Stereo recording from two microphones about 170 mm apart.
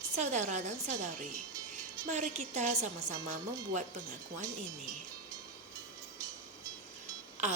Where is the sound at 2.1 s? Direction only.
45° right (ahead or behind).